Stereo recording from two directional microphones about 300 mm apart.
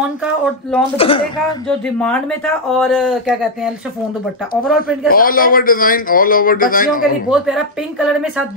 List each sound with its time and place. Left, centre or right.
0.2 s speech: centre
0.9 s speech: centre
2.0 s speech: centre
5.0 s speech: left
7.2 s speech: centre